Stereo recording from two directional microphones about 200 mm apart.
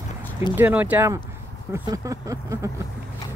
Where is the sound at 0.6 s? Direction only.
10° right (ahead or behind).